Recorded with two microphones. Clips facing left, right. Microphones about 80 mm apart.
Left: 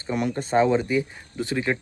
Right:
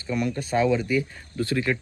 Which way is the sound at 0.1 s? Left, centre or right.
Left.